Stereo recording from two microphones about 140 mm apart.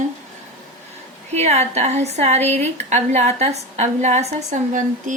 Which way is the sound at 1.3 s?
50° right (ahead or behind).